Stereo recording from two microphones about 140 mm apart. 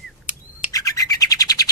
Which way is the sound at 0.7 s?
25° left (ahead or behind).